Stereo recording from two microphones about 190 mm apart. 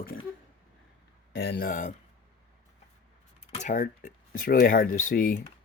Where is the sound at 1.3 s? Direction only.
60° left (ahead or behind).